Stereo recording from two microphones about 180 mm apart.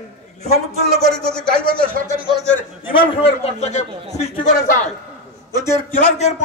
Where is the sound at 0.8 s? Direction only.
60° right (ahead or behind).